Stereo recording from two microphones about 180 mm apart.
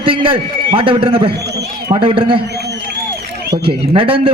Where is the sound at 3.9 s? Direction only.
30° right (ahead or behind).